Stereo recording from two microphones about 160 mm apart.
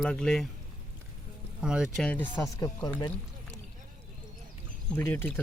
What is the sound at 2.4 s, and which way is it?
Speech, 20° left (ahead or behind).